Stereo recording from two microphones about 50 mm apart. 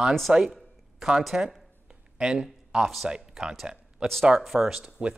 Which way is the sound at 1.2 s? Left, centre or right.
Centre.